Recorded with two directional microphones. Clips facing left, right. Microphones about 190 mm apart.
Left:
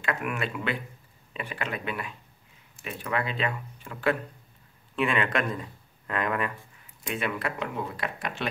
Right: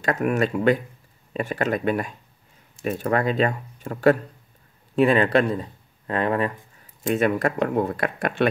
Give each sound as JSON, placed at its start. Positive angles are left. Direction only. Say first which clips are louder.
{"t": 0.0, "sound": "speech", "louder": "right 9 dB", "side_deg": -40}
{"t": 7.0, "sound": "speech", "louder": "right 10 dB", "side_deg": -45}